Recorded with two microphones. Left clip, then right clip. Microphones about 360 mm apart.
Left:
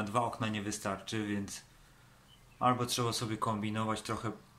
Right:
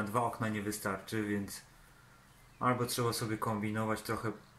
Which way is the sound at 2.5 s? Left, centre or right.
Centre.